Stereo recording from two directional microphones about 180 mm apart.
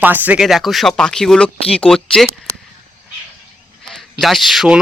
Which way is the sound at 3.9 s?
Centre (ahead or behind).